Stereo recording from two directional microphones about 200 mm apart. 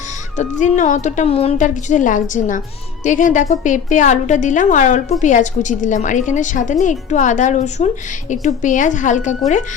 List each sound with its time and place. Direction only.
0.3 s a woman's voice: 40° left (ahead or behind)